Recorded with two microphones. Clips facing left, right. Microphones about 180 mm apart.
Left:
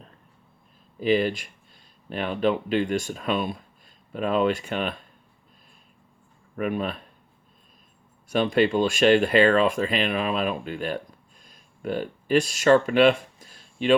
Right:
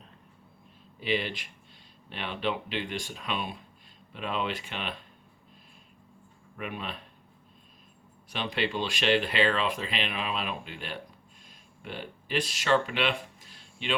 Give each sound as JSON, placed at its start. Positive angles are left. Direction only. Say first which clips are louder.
{"t": 0.9, "sound": "speech", "louder": "left 9 dB", "side_deg": 45}
{"t": 6.6, "sound": "speech", "louder": "left 10 dB", "side_deg": 45}
{"t": 8.3, "sound": "speech", "louder": "left 10 dB", "side_deg": 45}
{"t": 11.4, "sound": "a sound", "louder": "left 13 dB", "side_deg": 45}